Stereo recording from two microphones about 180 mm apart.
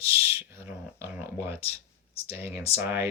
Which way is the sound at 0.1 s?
15° right (ahead or behind).